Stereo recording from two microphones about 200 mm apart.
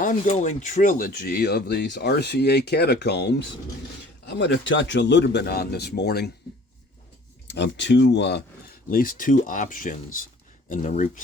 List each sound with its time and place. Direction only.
0.0 s speech: 40° left (ahead or behind)
7.4 s speech: 60° left (ahead or behind); by 11.2 s 35° left (ahead or behind)